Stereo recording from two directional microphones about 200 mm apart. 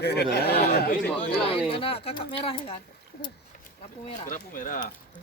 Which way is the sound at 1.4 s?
30° left (ahead or behind).